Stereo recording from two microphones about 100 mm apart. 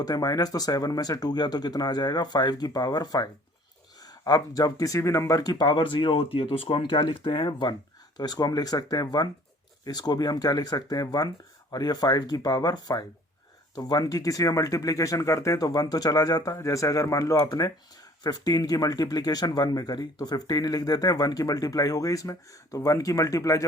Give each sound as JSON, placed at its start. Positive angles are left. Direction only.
{"t": 0.0, "sound": "speech", "side_deg": 40}